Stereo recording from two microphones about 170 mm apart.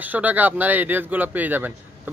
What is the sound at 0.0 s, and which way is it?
Speech, 10° right (ahead or behind).